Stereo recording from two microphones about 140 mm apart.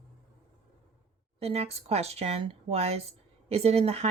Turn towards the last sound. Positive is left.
turn(degrees=-45)  # may be behind; listen again after turning